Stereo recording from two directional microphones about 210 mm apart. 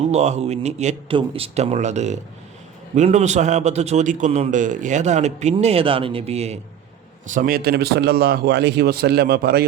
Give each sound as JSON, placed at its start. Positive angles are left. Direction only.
{"t": 0.1, "sound": "a man's voice", "side_deg": -30}